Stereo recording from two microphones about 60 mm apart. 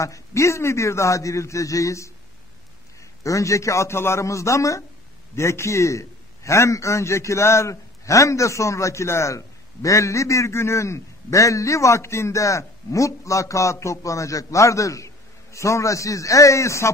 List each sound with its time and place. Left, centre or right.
0.0 s a man's voice: left
3.3 s a man's voice: left